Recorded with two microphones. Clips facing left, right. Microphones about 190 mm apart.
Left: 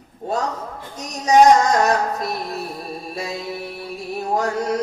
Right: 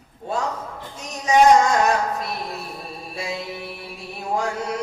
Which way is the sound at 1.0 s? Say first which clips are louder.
Left 3 dB; 40° left (ahead or behind).